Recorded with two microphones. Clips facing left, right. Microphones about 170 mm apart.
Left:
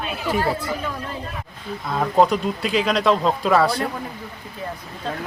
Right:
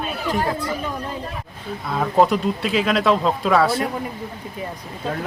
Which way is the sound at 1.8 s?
Centre (ahead or behind).